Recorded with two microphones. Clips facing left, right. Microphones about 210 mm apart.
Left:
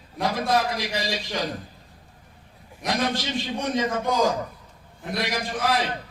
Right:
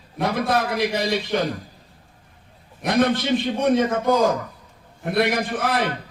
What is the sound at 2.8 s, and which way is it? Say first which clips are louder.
A man's voice: right 6 dB; 55° right (ahead or behind).